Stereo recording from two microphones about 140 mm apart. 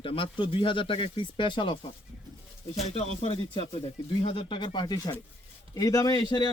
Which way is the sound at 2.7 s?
50° left (ahead or behind).